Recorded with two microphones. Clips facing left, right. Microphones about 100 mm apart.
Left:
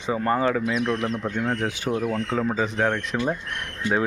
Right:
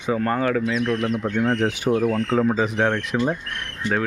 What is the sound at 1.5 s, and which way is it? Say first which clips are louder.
Speech: right 6 dB; 15° right (ahead or behind).